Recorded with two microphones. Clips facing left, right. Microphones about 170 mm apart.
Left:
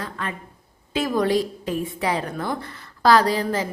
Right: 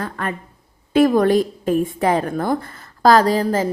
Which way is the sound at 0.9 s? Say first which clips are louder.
Right 7 dB; 55° right (ahead or behind).